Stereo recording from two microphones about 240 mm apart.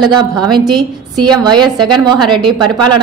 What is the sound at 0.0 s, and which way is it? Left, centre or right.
A woman's voice, centre.